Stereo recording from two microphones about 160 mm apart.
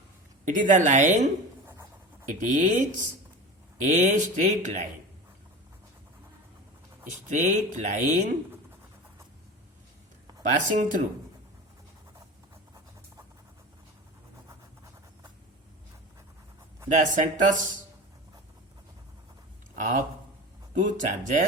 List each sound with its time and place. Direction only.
0.4 s speech: 55° right (ahead or behind)
7.3 s speech: 50° right (ahead or behind)
10.8 s speech: 55° right (ahead or behind)
16.9 s speech: 50° right (ahead or behind)
20.7 s speech: 50° right (ahead or behind)